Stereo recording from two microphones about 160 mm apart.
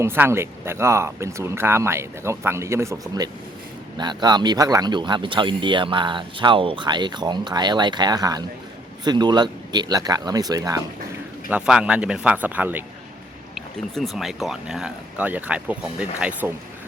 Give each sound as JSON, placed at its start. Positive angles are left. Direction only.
{"t": 0.0, "sound": "speech", "side_deg": -15}
{"t": 11.4, "sound": "speech", "side_deg": -5}
{"t": 13.9, "sound": "speech", "side_deg": 0}